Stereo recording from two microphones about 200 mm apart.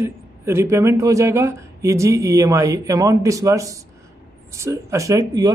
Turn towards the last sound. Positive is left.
turn(degrees=-20)  # may be behind; listen again after turning